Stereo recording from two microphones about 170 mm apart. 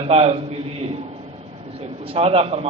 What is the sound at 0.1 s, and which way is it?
Speech, 35° right (ahead or behind).